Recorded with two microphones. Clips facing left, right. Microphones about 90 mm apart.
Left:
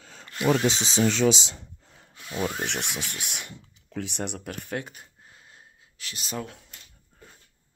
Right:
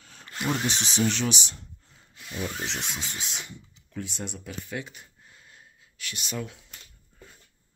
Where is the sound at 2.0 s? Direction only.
65° left (ahead or behind); by 5.0 s 50° left (ahead or behind).